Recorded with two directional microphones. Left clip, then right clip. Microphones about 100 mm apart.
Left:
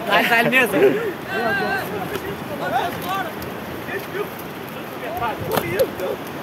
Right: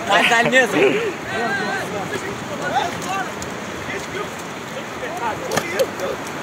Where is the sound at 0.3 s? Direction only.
15° left (ahead or behind).